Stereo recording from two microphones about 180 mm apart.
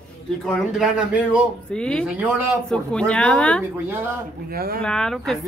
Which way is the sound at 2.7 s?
5° left (ahead or behind).